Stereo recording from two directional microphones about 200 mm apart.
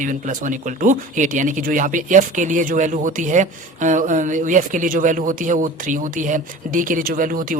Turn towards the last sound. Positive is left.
turn(degrees=-45)  # may be behind; listen again after turning